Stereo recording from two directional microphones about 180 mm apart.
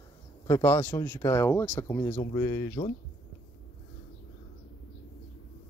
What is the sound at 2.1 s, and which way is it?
Speech, 25° left (ahead or behind).